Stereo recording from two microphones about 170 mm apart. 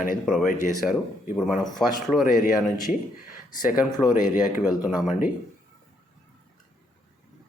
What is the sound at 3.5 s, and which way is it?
Speech, 55° left (ahead or behind).